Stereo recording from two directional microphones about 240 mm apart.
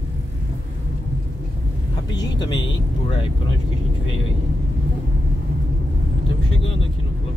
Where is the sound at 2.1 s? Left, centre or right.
Centre.